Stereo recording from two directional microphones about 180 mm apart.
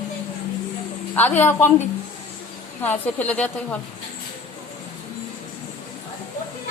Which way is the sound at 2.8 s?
10° left (ahead or behind).